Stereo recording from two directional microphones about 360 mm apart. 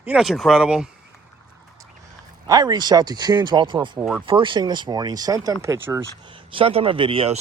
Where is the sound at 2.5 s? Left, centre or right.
Centre.